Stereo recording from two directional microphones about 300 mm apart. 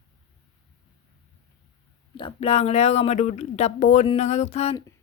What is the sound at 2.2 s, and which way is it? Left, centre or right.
Speech, centre.